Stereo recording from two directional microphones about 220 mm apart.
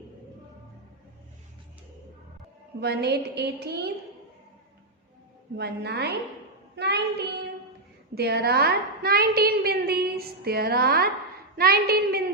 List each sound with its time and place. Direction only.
2.8 s a woman's voice: 45° right (ahead or behind)
5.5 s a woman's voice: 50° right (ahead or behind)